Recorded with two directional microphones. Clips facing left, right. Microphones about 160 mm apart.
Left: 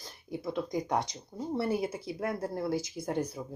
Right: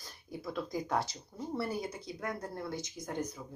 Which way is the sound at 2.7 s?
10° left (ahead or behind).